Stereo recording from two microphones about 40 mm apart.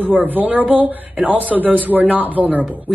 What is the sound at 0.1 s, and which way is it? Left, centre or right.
Speech, right.